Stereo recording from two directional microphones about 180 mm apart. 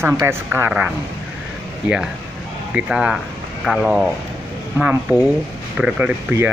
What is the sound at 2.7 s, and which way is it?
Speech, 5° right (ahead or behind).